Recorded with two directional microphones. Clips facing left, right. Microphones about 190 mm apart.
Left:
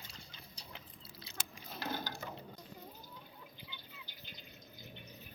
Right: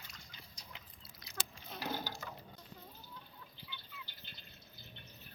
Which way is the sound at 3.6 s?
15° left (ahead or behind).